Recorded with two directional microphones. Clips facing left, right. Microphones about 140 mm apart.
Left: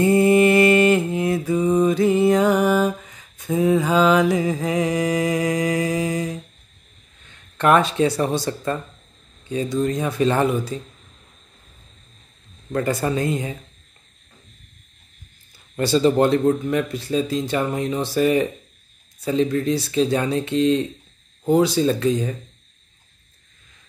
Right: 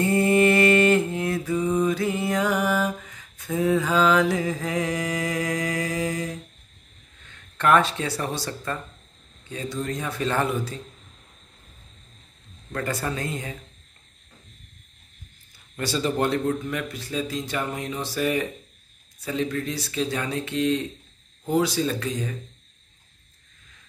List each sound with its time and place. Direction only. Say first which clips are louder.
0.0 s mantra: left 5 dB; 15° left (ahead or behind)
7.5 s speech: left 3 dB; 20° left (ahead or behind)
12.7 s speech: left 7 dB; 20° left (ahead or behind)
15.8 s speech: left 8 dB; 25° left (ahead or behind)